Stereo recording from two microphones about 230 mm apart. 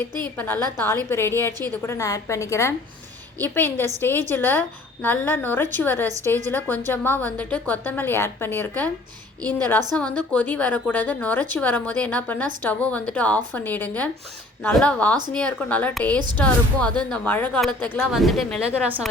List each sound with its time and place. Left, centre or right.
0.3 s a woman's voice: centre